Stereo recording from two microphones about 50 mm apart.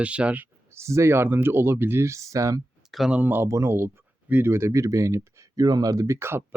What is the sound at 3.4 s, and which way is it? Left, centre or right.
Speech, right.